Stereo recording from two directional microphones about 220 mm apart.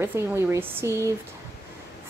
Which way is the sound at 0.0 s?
10° right (ahead or behind).